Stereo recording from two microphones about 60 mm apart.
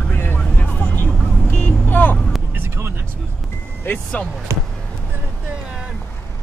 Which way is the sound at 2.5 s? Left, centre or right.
Right.